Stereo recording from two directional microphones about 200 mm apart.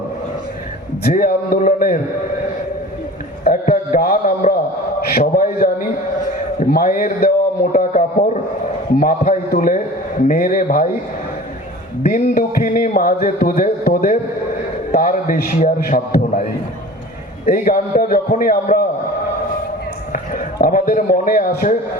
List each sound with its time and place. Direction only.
1.0 s speech: 45° left (ahead or behind)
3.4 s a sound: 45° left (ahead or behind)
6.6 s a man's voice: 45° left (ahead or behind)
12.0 s speech: 45° left (ahead or behind)
17.4 s speech: 45° left (ahead or behind)
20.1 s a man's voice: 45° left (ahead or behind)